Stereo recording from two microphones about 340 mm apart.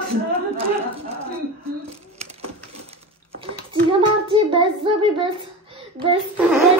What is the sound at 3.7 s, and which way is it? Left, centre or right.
A child's voice, centre.